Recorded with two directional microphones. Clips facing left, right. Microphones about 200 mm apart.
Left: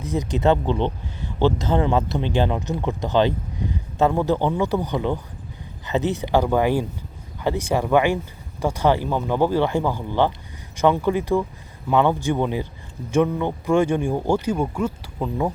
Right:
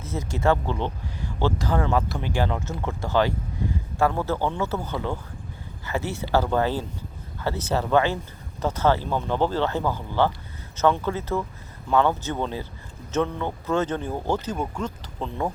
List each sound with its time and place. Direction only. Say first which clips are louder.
0.0 s speech: left 4 dB; 15° left (ahead or behind)